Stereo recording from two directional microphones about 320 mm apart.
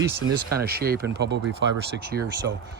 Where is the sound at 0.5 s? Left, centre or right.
Right.